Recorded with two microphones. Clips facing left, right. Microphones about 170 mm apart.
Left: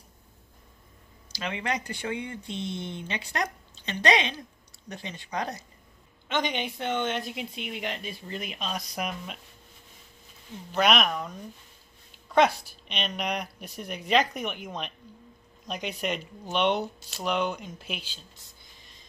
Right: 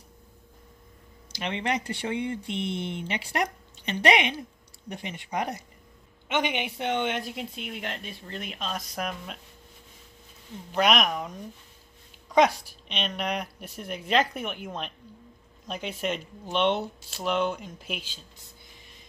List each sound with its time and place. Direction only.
1.3 s a woman's voice: 25° right (ahead or behind)
7.3 s speech: centre (ahead or behind)
10.7 s speech: 5° right (ahead or behind)
12.8 s speech: 5° left (ahead or behind)
13.2 s speech: 5° right (ahead or behind)